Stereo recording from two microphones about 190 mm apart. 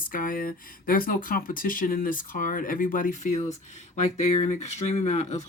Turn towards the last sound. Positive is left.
turn(degrees=35)  # may be behind; listen again after turning